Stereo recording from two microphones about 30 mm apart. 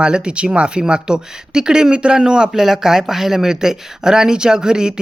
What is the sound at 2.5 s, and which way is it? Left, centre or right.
Speech, centre.